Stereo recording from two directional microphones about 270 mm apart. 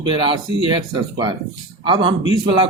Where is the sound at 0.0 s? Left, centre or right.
Centre.